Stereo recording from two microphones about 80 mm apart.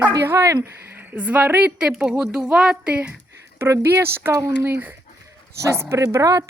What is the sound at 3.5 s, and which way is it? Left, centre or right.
Speech, right.